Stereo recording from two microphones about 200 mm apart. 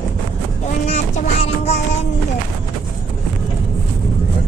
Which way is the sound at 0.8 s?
30° left (ahead or behind).